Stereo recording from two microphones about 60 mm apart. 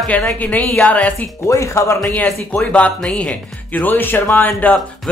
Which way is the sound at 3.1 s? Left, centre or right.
Left.